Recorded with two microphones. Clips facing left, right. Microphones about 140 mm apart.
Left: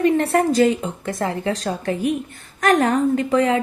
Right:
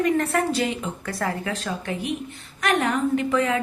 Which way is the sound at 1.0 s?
25° left (ahead or behind).